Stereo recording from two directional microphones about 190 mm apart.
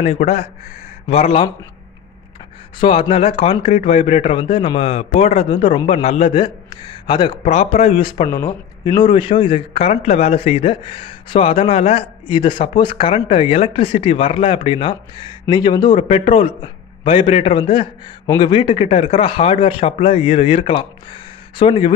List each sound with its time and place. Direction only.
0.0 s speech: 30° left (ahead or behind)
2.8 s speech: 30° left (ahead or behind)